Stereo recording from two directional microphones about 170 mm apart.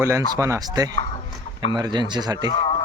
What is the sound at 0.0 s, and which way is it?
Speech, 15° right (ahead or behind).